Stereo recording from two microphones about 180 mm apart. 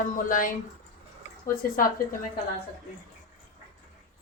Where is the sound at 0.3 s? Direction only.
50° left (ahead or behind).